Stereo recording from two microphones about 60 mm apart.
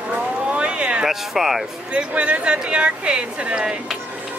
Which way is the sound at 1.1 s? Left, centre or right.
Centre.